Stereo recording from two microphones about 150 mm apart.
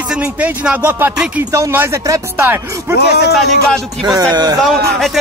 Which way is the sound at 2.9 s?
90° left.